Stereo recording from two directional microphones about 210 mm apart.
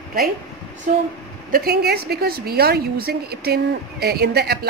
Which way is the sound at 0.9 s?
40° right (ahead or behind).